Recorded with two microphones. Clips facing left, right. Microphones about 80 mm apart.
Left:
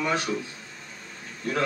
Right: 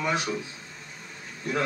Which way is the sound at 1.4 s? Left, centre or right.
Centre.